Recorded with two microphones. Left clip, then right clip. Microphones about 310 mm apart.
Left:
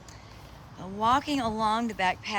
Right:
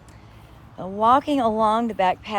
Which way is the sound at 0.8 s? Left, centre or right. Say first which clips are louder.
Right 7 dB; centre.